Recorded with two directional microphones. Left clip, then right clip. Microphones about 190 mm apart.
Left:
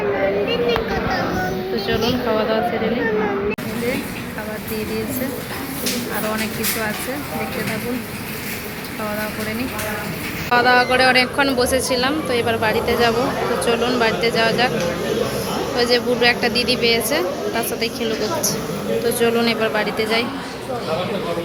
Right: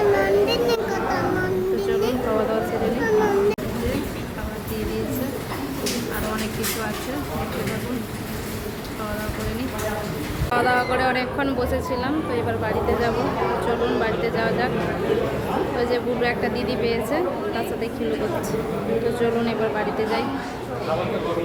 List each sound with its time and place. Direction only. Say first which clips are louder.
0.4 s a sound: left 2 dB; 55° right (ahead or behind)
10.5 s a woman's voice: left 6 dB; 5° left (ahead or behind)
15.8 s a woman's voice: left 9 dB; centre (ahead or behind)
19.2 s a woman's voice: left 5 dB; centre (ahead or behind)